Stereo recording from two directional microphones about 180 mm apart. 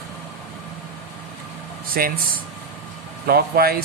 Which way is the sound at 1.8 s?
55° right (ahead or behind).